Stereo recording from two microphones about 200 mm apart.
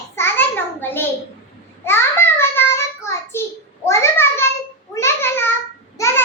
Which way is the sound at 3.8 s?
15° left (ahead or behind).